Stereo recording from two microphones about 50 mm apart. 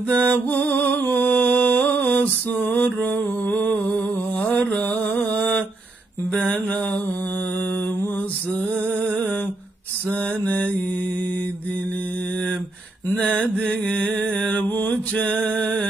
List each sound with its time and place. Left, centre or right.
0.2 s music: left
3.5 s a sound: left
6.3 s mantra: left
10.0 s mantra: left
13.1 s mantra: left
15.4 s music: centre